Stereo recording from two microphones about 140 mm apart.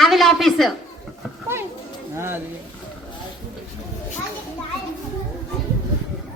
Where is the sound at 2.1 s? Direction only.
20° right (ahead or behind).